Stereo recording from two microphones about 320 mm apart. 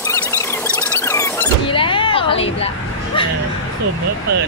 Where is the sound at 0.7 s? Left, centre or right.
Centre.